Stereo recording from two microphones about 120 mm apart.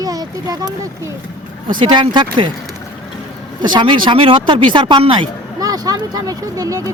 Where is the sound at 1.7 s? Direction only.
40° right (ahead or behind).